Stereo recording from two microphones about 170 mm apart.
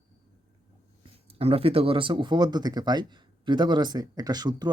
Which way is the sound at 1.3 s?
35° right (ahead or behind).